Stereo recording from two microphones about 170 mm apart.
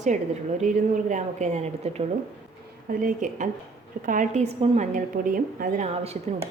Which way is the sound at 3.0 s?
50° right (ahead or behind).